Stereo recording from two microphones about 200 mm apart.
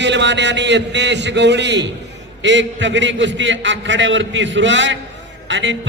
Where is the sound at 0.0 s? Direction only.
60° right (ahead or behind).